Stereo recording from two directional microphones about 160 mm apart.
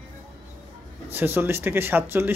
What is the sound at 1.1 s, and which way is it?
Speech, 15° right (ahead or behind).